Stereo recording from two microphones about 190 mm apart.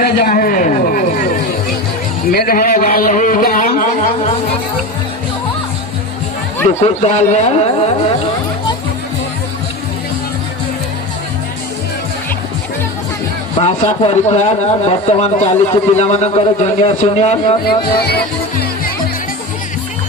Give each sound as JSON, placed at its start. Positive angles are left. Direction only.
{"t": 0.0, "sound": "a sound", "side_deg": 50}
{"t": 2.3, "sound": "a man's voice", "side_deg": 55}
{"t": 6.8, "sound": "a man's voice", "side_deg": 35}
{"t": 13.6, "sound": "a man's voice", "side_deg": 30}
{"t": 17.7, "sound": "speech", "side_deg": 55}